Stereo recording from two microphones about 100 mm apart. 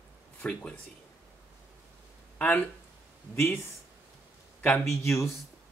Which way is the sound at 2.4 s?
15° left (ahead or behind).